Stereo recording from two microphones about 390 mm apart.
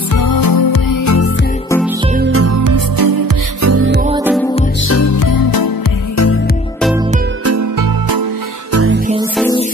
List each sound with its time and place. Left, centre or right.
0.1 s music: left
2.3 s music: right
3.6 s music: right
3.9 s music: centre
4.2 s music: centre
4.8 s music: left
6.1 s music: left
8.7 s music: right
9.4 s music: centre